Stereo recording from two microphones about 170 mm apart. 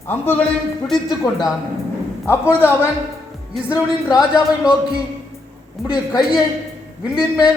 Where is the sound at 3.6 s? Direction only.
5° right (ahead or behind).